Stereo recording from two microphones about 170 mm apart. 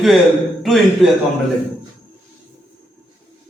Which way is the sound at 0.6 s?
Centre (ahead or behind).